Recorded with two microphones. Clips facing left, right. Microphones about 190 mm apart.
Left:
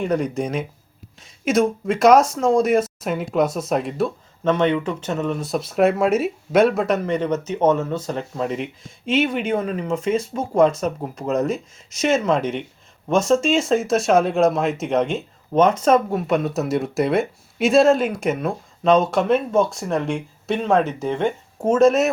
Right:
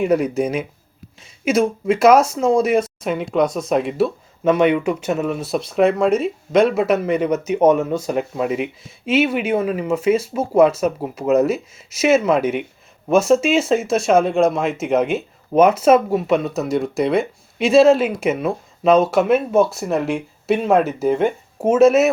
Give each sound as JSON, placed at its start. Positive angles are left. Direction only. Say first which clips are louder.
{"t": 0.0, "sound": "speech", "louder": "right 4 dB", "side_deg": -5}